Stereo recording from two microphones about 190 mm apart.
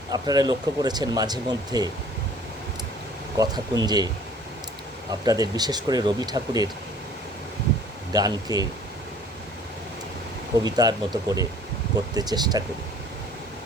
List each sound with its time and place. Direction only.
0.1 s speech: 20° right (ahead or behind)
3.3 s speech: 20° right (ahead or behind)
5.2 s speech: 20° right (ahead or behind)
8.1 s speech: 20° right (ahead or behind)
10.6 s speech: 20° right (ahead or behind)